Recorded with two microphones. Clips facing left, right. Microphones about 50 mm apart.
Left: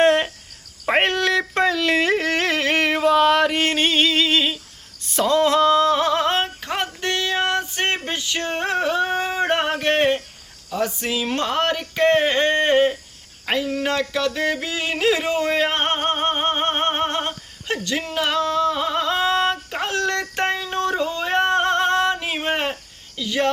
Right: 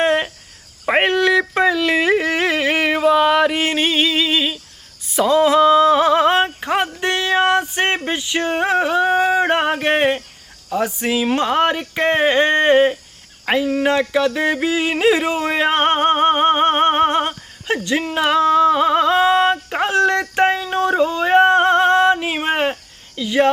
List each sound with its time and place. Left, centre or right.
0.0 s cricket: centre
0.9 s yodeling: centre
5.0 s a sound: centre
10.7 s speech: centre
13.4 s yodeling: centre